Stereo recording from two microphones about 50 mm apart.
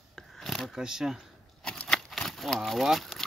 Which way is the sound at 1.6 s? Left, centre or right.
Centre.